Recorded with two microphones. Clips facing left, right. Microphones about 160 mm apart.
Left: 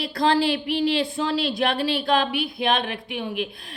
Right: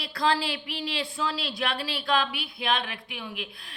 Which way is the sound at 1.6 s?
20° left (ahead or behind).